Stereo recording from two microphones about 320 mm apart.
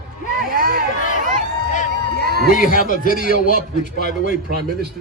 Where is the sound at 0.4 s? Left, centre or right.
Right.